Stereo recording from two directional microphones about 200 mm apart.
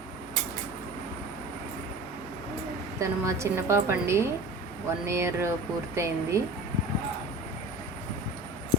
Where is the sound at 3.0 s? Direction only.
15° right (ahead or behind).